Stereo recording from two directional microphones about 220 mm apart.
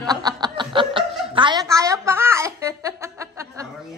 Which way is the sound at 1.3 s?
20° right (ahead or behind).